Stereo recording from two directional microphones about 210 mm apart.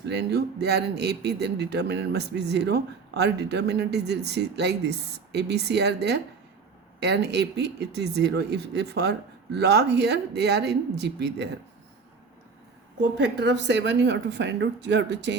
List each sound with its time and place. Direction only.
0.0 s speech: 55° right (ahead or behind)
13.0 s a woman's voice: 55° right (ahead or behind)